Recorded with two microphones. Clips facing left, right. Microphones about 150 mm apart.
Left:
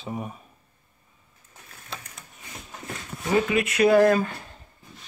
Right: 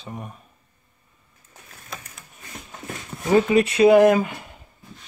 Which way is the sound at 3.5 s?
30° right (ahead or behind).